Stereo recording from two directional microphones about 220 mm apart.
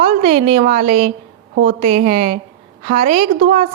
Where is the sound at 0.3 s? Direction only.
25° right (ahead or behind).